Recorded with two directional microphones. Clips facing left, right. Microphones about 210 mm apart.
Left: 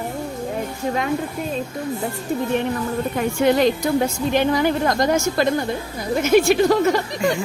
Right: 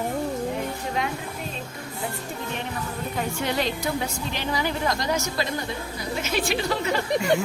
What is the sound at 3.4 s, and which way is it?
A woman's voice, 50° left (ahead or behind).